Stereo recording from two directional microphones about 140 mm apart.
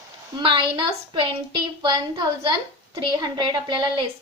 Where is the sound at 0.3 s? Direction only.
35° right (ahead or behind).